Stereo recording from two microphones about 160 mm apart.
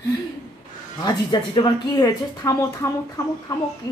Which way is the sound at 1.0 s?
25° left (ahead or behind).